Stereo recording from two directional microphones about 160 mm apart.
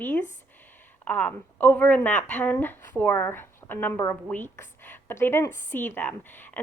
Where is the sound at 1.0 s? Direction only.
10° left (ahead or behind).